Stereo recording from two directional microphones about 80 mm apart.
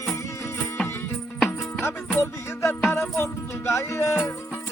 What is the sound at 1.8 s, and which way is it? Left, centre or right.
Music, left.